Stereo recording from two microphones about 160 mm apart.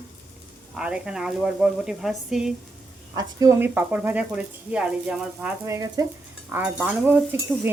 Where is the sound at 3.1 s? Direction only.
20° right (ahead or behind).